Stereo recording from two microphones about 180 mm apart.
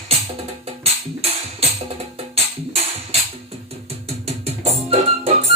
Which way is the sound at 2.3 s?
35° right (ahead or behind).